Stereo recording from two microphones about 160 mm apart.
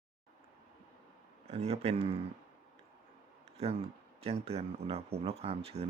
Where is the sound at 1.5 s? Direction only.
40° right (ahead or behind).